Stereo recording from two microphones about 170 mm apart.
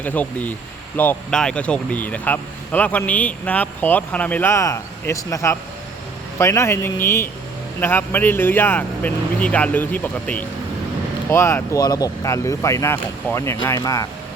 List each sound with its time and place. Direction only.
0.0 s speech: 10° left (ahead or behind)